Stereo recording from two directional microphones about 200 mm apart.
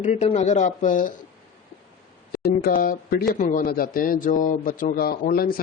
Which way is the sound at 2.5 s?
45° left (ahead or behind).